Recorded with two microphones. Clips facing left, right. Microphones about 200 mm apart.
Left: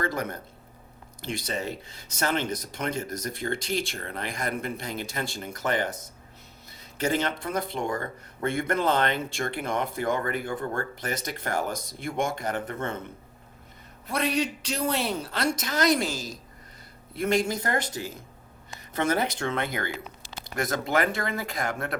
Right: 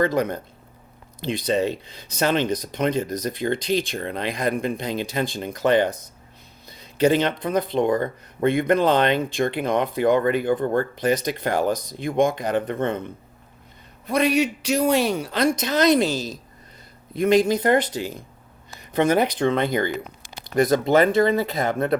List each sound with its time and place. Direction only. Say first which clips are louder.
0.0 s speech: right 9 dB; 20° right (ahead or behind)
7.0 s speech: right 8 dB; 20° right (ahead or behind)
14.1 s speech: right 7 dB; 15° right (ahead or behind)